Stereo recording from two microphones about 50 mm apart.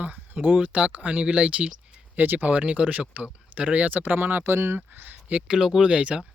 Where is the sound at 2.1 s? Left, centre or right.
Right.